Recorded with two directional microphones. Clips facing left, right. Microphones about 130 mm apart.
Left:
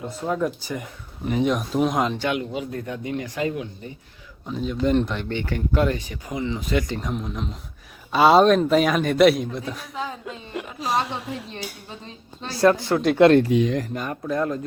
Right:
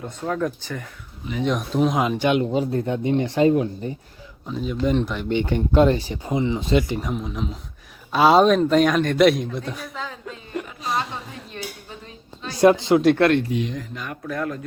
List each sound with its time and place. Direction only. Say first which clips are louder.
0.0 s a man's voice: even; 5° left (ahead or behind)
2.1 s speech: right 5 dB; 20° right (ahead or behind)
2.4 s speech: right 7 dB; 35° right (ahead or behind)
3.5 s speech: right 10 dB; 40° right (ahead or behind)
4.4 s a man's voice: even; centre (ahead or behind)
5.3 s speech: right 5 dB; 20° right (ahead or behind)
7.0 s a man's voice: right 1 dB; centre (ahead or behind)
9.9 s speech: left 2 dB; 15° left (ahead or behind)
10.5 s a woman's voice: left 1 dB; 5° left (ahead or behind)
12.5 s speech: right 3 dB; 20° right (ahead or behind)
13.5 s speech: left 5 dB; 70° left (ahead or behind)
13.9 s speech: left 4 dB; 40° left (ahead or behind)
14.3 s speech: left 3 dB; 25° left (ahead or behind)